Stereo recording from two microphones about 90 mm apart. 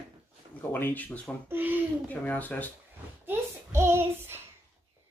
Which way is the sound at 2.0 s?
20° left (ahead or behind).